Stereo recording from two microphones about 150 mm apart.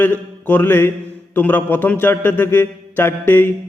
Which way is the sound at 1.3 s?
10° left (ahead or behind).